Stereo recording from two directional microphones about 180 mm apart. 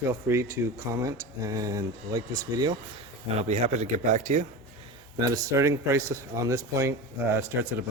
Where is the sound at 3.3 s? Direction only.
40° right (ahead or behind).